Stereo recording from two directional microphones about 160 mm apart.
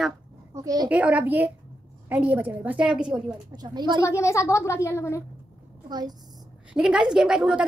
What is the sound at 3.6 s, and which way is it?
Speech, 25° right (ahead or behind).